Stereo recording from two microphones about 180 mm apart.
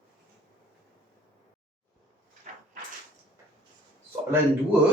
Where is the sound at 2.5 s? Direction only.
45° right (ahead or behind).